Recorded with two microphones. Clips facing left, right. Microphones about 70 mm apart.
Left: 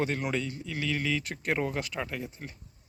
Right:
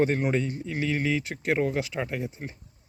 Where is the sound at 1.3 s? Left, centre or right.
Centre.